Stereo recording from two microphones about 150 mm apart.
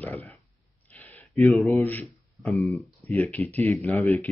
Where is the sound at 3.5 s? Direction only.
15° left (ahead or behind).